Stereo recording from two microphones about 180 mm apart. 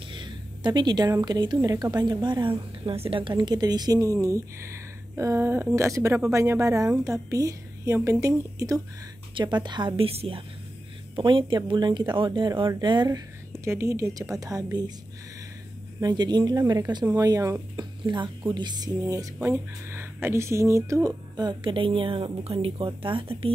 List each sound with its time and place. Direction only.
0.1 s a woman's voice: 25° right (ahead or behind)
16.0 s a woman's voice: 25° right (ahead or behind)